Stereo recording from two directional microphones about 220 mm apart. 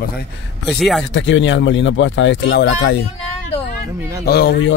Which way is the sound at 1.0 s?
60° left (ahead or behind).